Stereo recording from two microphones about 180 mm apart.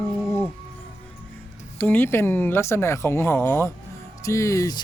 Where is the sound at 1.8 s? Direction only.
10° left (ahead or behind).